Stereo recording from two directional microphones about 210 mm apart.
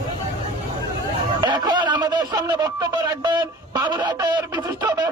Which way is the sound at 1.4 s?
20° right (ahead or behind).